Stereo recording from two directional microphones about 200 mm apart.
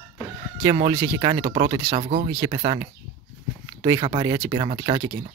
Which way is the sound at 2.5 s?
25° right (ahead or behind).